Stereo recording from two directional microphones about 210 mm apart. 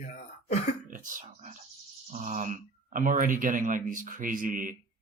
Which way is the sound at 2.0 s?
35° right (ahead or behind).